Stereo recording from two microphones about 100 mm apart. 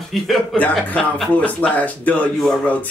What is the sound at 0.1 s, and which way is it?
Speech, centre (ahead or behind).